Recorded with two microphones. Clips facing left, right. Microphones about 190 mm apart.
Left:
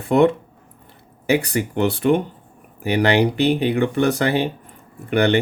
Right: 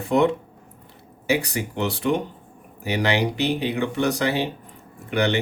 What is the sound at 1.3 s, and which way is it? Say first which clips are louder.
Speech: left 4 dB; 55° left (ahead or behind).